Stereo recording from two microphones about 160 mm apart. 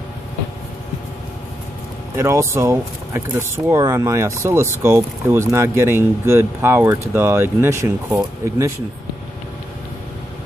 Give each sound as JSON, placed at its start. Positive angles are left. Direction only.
{"t": 2.1, "sound": "speech", "side_deg": -15}